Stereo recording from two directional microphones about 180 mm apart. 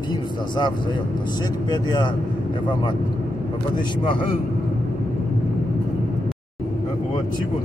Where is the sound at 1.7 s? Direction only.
20° left (ahead or behind).